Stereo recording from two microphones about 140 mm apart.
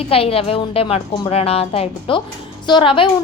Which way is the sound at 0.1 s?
40° left (ahead or behind).